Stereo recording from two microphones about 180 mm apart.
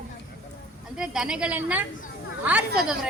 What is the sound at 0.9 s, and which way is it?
A woman's voice, 5° right (ahead or behind).